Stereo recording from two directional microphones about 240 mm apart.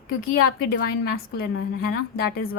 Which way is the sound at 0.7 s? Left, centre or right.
Left.